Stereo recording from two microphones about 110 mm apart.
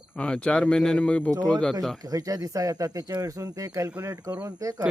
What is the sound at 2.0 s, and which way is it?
Speech, 35° right (ahead or behind).